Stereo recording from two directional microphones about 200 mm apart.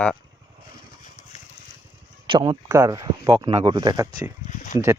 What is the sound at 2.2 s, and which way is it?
Speech, 25° right (ahead or behind).